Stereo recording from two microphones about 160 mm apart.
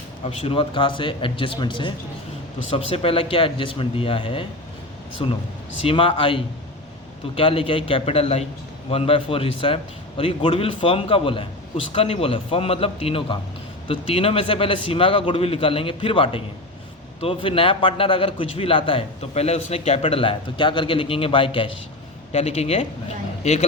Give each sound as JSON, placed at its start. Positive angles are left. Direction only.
{"t": 0.4, "sound": "a man's voice", "side_deg": 35}